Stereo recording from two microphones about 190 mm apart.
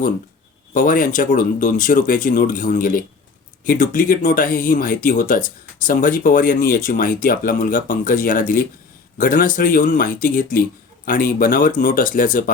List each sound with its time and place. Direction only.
0.7 s speech: 45° left (ahead or behind)